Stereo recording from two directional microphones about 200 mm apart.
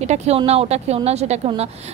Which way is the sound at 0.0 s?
35° right (ahead or behind).